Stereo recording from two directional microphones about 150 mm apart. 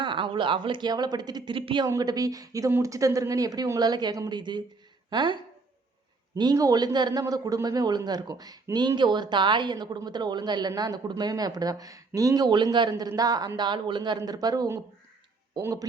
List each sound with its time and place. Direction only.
0.0 s a man's voice: 35° right (ahead or behind)